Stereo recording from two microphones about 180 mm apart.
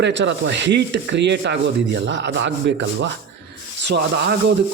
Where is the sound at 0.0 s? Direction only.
85° right.